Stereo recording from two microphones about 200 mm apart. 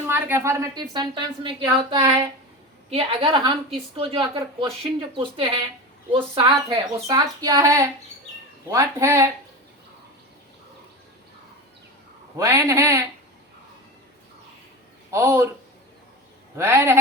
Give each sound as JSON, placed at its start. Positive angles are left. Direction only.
{"t": 0.1, "sound": "a woman's voice", "side_deg": -10}
{"t": 12.4, "sound": "speech", "side_deg": -15}
{"t": 15.1, "sound": "speech", "side_deg": -10}
{"t": 16.6, "sound": "speech", "side_deg": -10}